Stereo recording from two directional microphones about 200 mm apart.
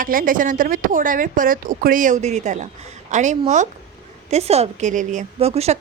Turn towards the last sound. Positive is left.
turn(degrees=-30)  # may be behind; listen again after turning